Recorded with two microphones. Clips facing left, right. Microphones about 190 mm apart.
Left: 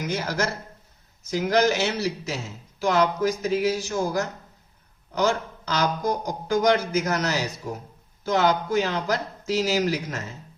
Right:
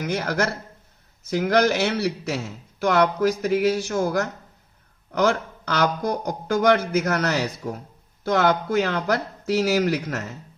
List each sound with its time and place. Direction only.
0.0 s a man's voice: 60° right (ahead or behind)